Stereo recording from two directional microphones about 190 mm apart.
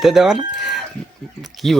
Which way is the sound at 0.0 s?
Centre (ahead or behind).